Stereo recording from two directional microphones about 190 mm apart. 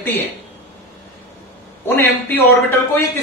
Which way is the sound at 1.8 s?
10° left (ahead or behind).